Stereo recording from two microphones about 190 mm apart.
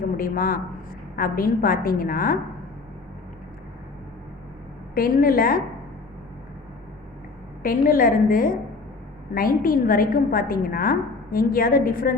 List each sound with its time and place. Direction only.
0.0 s a woman's voice: 50° left (ahead or behind)
4.9 s a woman's voice: 50° left (ahead or behind)
7.6 s a woman's voice: 50° left (ahead or behind)